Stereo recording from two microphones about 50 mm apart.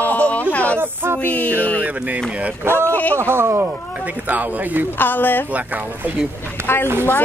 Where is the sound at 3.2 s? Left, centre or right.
Right.